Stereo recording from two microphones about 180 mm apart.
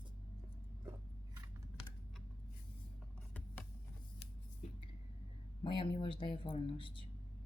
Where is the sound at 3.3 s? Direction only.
10° left (ahead or behind).